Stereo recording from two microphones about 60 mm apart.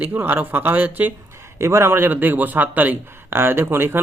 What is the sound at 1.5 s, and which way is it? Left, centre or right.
Speech, right.